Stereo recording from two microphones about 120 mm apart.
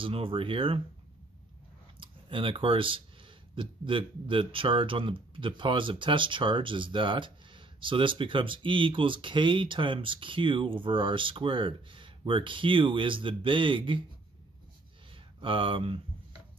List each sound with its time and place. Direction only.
0.0 s speech: 50° right (ahead or behind)
2.0 s speech: 45° right (ahead or behind)
15.4 s speech: 45° right (ahead or behind)